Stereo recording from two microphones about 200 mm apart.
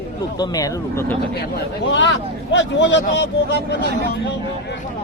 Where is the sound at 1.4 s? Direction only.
65° left (ahead or behind).